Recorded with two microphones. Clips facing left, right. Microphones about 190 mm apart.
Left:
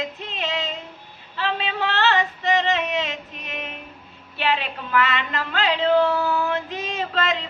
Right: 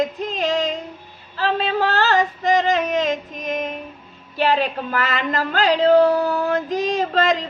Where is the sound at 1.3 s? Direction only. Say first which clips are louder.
Right 5 dB; 40° right (ahead or behind).